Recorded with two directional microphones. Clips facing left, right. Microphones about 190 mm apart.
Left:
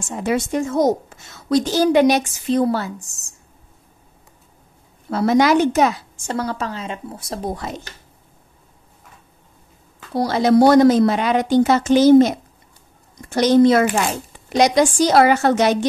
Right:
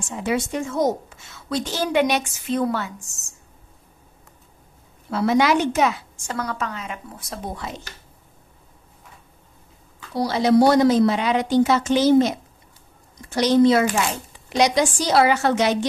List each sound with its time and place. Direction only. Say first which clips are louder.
0.1 s a woman's voice: left 3 dB; 45° left (ahead or behind)
5.1 s a woman's voice: left 3 dB; 40° left (ahead or behind)
10.1 s speech: left 2 dB; 50° left (ahead or behind)